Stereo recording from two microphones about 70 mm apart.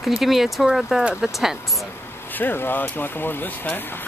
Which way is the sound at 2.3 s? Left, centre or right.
Left.